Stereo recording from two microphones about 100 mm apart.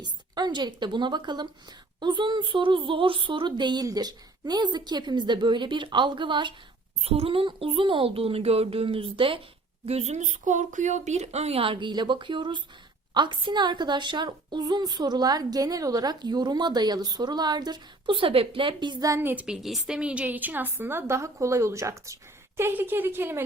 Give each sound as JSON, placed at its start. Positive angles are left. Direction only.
{"t": 0.0, "sound": "a woman's voice", "side_deg": -45}
{"t": 7.0, "sound": "speech", "side_deg": -85}
{"t": 9.8, "sound": "a woman's voice", "side_deg": -90}
{"t": 11.2, "sound": "a woman's voice", "side_deg": -90}
{"t": 19.2, "sound": "a woman's voice", "side_deg": -20}
{"t": 19.5, "sound": "a woman's voice", "side_deg": 0}